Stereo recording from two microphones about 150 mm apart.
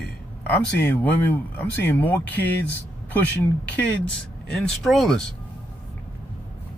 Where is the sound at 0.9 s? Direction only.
10° left (ahead or behind).